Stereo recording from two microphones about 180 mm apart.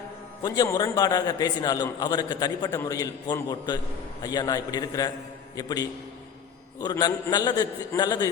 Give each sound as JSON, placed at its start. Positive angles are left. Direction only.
{"t": 0.4, "sound": "a man's voice", "side_deg": 20}